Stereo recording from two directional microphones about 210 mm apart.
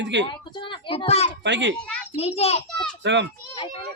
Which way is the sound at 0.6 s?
25° left (ahead or behind).